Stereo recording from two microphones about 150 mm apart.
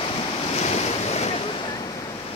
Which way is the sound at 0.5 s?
45° left (ahead or behind).